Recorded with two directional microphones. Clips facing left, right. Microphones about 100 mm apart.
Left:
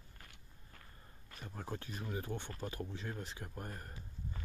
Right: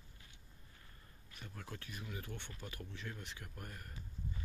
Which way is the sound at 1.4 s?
35° left (ahead or behind).